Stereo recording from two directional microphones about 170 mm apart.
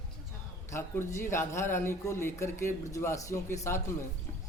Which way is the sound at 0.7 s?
15° left (ahead or behind).